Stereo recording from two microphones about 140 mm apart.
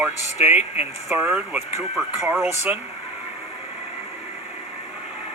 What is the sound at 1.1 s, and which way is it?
Speech, 10° right (ahead or behind).